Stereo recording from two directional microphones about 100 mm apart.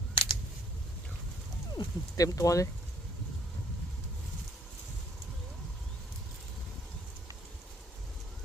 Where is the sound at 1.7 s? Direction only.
35° left (ahead or behind).